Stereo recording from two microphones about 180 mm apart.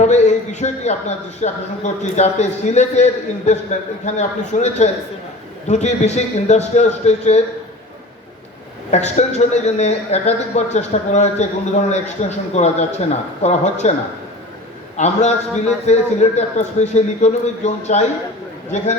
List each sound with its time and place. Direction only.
0.0 s a man's voice: 40° left (ahead or behind)
8.9 s a man's voice: 40° left (ahead or behind)
14.9 s a man's voice: 40° left (ahead or behind)